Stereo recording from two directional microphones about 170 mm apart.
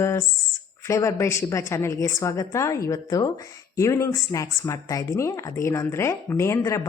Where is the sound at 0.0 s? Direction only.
15° left (ahead or behind).